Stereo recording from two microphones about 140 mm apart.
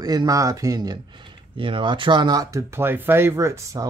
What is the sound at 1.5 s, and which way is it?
Speech, 40° right (ahead or behind).